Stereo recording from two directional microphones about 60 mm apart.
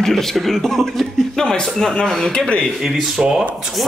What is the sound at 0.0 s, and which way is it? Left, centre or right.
Speech, centre.